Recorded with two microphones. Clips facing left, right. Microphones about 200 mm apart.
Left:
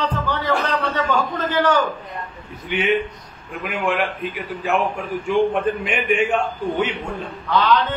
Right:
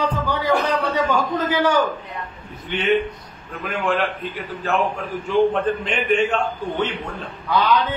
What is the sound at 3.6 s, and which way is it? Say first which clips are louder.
A man's voice: even; 10° left (ahead or behind).